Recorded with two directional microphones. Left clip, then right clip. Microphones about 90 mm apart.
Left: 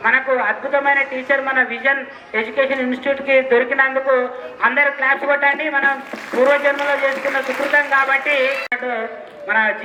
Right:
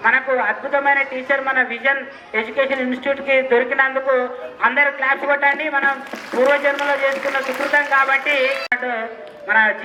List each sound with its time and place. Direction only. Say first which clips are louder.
0.0 s a man's voice: even; 15° right (ahead or behind)